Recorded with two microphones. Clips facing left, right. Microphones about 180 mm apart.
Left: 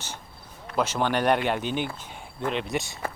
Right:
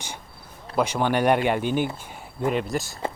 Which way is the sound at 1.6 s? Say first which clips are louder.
Right 5 dB; 50° right (ahead or behind).